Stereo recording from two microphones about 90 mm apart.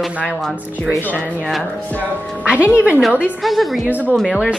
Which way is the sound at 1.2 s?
15° right (ahead or behind).